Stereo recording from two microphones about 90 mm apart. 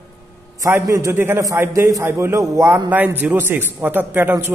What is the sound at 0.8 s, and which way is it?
A man's voice, 35° right (ahead or behind).